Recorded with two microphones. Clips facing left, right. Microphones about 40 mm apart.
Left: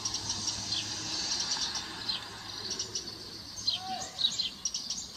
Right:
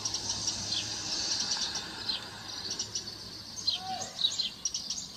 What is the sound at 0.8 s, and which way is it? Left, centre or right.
Vehicle, centre.